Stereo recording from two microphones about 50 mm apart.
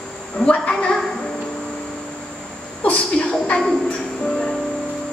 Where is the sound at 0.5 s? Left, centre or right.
Left.